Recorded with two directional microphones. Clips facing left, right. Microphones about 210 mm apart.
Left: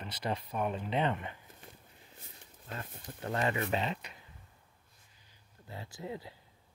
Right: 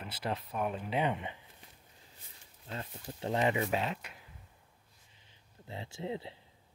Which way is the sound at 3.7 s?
5° right (ahead or behind).